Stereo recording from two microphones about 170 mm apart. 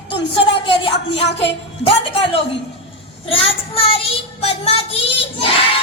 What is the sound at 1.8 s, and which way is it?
Child singing, 30° left (ahead or behind).